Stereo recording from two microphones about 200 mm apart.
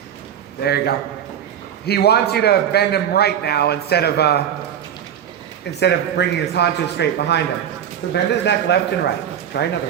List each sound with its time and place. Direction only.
0.6 s a man's voice: 55° left (ahead or behind)
5.8 s a man's voice: 60° left (ahead or behind)